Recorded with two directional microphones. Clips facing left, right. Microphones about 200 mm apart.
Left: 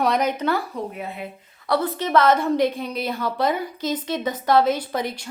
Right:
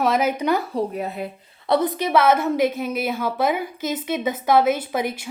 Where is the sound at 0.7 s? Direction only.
40° right (ahead or behind).